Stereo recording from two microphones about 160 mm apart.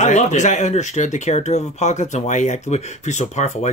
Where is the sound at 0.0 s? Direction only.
45° left (ahead or behind).